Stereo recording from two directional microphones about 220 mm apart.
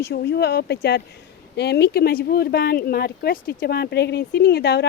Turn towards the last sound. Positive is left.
turn(degrees=45)  # may be behind; listen again after turning